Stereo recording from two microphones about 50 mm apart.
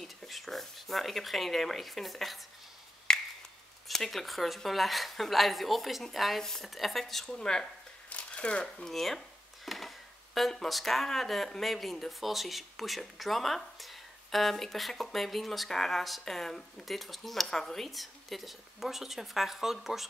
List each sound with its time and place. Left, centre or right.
0.0 s speech: centre
3.1 s finger snapping: centre
3.8 s speech: centre
8.1 s shuffling cards: left
8.8 s speech: centre